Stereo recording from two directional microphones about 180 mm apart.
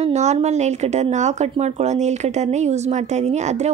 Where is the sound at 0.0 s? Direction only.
40° right (ahead or behind).